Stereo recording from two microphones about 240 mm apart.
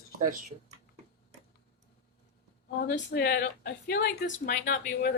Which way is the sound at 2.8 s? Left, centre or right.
Left.